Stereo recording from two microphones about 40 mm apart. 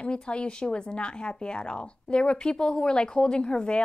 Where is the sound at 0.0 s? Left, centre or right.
Left.